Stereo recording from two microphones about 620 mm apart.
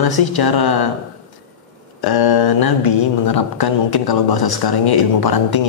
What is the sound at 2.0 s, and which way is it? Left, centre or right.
A man's voice, left.